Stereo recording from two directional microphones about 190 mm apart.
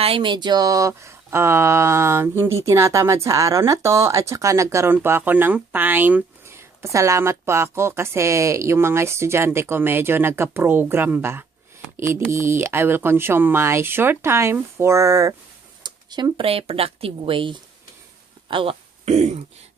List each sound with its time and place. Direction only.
0.0 s speech: 25° right (ahead or behind)
18.5 s throat clearing: 30° right (ahead or behind)